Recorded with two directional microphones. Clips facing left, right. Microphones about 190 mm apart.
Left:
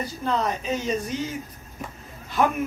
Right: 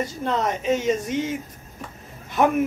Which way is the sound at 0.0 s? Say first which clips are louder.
Right 2 dB; 20° right (ahead or behind).